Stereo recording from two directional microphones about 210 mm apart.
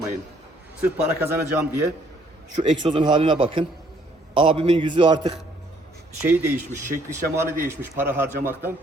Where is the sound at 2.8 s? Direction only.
20° right (ahead or behind).